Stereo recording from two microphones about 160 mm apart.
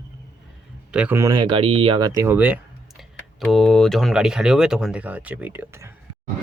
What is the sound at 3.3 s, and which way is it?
Speech, centre (ahead or behind).